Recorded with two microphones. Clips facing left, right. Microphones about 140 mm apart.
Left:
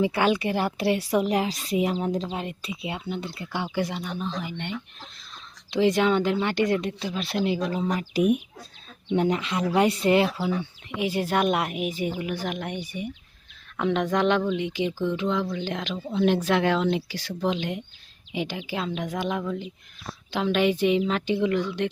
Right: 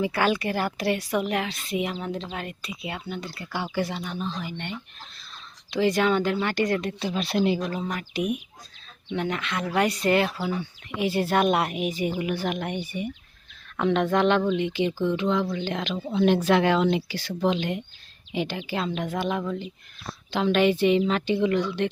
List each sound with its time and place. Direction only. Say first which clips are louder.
0.0 s a woman's voice: left 2 dB; 20° left (ahead or behind)
5.7 s a woman's voice: left 1 dB; 20° left (ahead or behind)
7.9 s speech: left 5 dB; 40° left (ahead or behind)
9.3 s a woman's voice: left 3 dB; 30° left (ahead or behind); by 11.9 s 5° left (ahead or behind)
11.9 s speech: right 2 dB; 5° right (ahead or behind)